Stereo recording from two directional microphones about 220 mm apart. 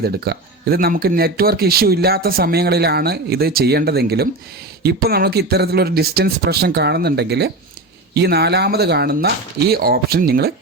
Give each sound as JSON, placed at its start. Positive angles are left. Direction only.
{"t": 0.0, "sound": "speech", "side_deg": -45}